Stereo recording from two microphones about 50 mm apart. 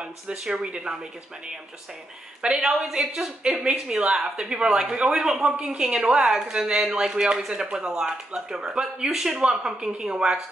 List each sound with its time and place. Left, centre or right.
0.0 s speech: centre
2.4 s speech: centre